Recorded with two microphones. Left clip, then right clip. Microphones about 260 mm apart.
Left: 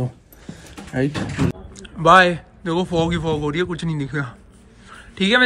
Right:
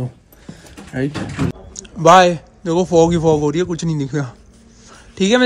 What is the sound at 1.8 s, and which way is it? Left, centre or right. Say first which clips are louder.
Speech: right 3 dB; centre.